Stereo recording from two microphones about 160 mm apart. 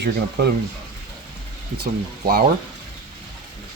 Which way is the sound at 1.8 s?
70° right (ahead or behind).